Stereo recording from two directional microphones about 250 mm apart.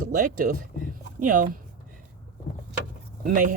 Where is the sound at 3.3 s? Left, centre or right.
Right.